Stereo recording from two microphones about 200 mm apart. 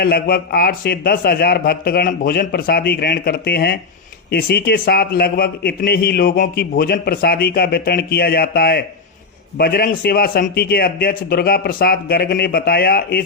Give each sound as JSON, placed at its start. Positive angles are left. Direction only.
{"t": 0.0, "sound": "a man's voice", "side_deg": 50}